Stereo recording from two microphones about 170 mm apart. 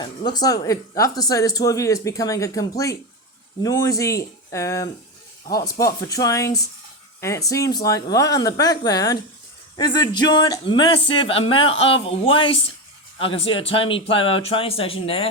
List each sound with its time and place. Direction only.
0.0 s a woman's voice: 25° left (ahead or behind)